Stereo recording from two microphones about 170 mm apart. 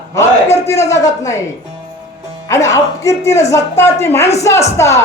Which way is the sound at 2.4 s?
20° left (ahead or behind).